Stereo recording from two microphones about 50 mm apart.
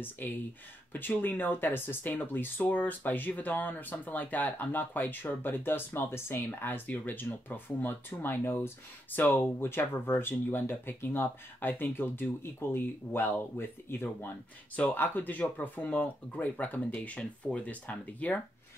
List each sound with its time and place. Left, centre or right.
0.2 s speech: left